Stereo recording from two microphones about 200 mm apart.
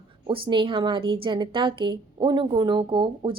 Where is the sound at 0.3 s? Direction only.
25° right (ahead or behind).